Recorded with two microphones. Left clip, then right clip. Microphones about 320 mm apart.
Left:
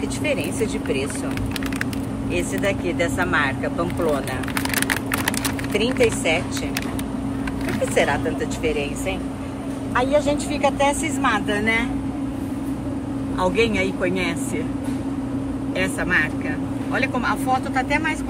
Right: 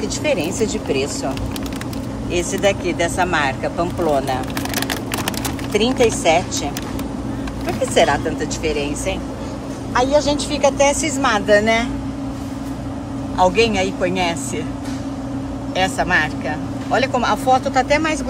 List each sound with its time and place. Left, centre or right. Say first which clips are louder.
0.2 s speech: right 4 dB; centre
2.3 s speech: right 5 dB; centre
5.7 s speech: right 4 dB; centre
7.9 s speech: right 5 dB; centre
9.9 s speech: right 4 dB; centre
13.4 s speech: right 5 dB; centre
15.8 s speech: right 4 dB; centre